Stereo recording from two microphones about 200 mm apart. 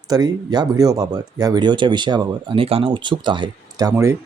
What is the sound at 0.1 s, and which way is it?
Speech, 20° right (ahead or behind).